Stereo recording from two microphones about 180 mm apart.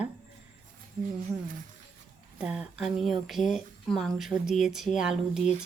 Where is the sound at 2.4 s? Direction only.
5° right (ahead or behind).